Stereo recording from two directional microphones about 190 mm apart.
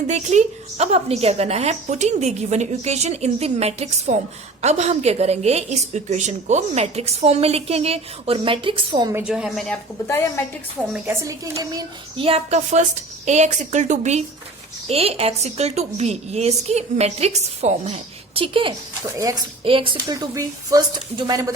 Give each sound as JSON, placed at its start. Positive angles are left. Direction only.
{"t": 0.1, "sound": "a woman's voice", "side_deg": -35}
{"t": 9.1, "sound": "a woman's voice", "side_deg": -5}
{"t": 10.9, "sound": "a woman's voice", "side_deg": -15}